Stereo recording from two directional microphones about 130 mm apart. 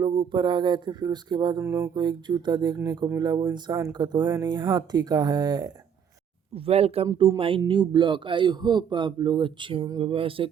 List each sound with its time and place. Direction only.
0.0 s speech: 35° right (ahead or behind)
1.6 s music: 20° right (ahead or behind)
2.0 s speech: 35° right (ahead or behind)
6.5 s speech: 50° right (ahead or behind)